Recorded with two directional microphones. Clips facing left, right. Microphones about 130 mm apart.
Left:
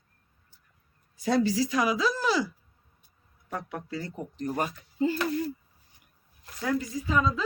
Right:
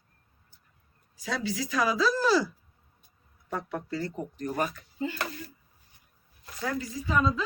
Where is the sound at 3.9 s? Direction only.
20° left (ahead or behind).